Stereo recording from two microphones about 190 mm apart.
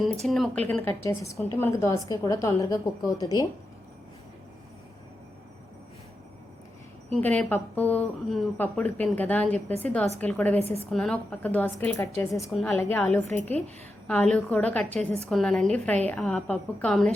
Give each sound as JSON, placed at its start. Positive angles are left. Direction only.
{"t": 0.3, "sound": "a woman's voice", "side_deg": 0}
{"t": 7.2, "sound": "a woman's voice", "side_deg": 10}